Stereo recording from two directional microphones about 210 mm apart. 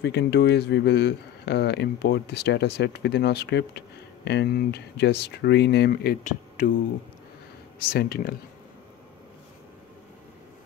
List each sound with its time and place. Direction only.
0.0 s speech: 55° left (ahead or behind)
7.9 s speech: 45° left (ahead or behind)